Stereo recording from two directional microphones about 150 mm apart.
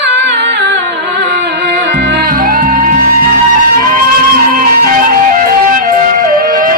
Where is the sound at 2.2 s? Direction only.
75° right (ahead or behind).